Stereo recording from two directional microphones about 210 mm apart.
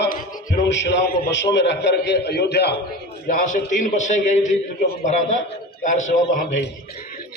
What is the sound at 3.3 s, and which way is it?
A man's voice, 40° left (ahead or behind).